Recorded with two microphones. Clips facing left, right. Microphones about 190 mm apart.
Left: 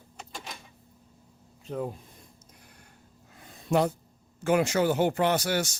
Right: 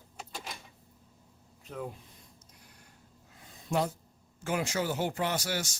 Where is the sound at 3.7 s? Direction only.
60° left (ahead or behind).